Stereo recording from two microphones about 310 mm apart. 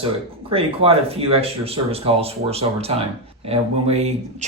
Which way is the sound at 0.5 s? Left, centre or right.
Centre.